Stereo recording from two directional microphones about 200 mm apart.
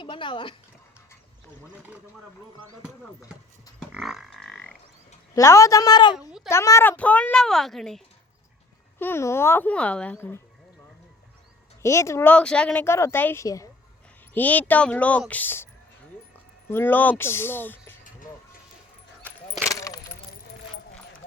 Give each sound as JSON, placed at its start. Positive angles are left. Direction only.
{"t": 0.0, "sound": "speech", "side_deg": 25}
{"t": 3.8, "sound": "a sound", "side_deg": 0}
{"t": 5.3, "sound": "speech", "side_deg": 15}
{"t": 9.0, "sound": "speech", "side_deg": 10}
{"t": 11.8, "sound": "speech", "side_deg": 15}
{"t": 19.2, "sound": "keys jangling", "side_deg": 10}